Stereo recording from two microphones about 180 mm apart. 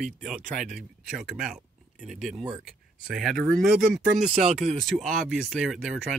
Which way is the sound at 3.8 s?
55° right (ahead or behind).